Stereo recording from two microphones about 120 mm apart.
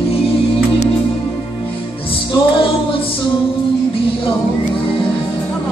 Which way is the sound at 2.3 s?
45° left (ahead or behind).